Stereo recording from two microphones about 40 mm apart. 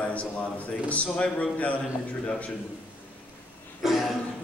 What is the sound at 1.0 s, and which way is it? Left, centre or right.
Speech, left.